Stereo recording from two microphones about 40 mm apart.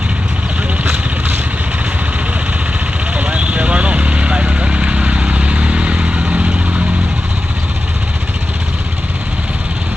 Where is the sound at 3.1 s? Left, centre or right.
Right.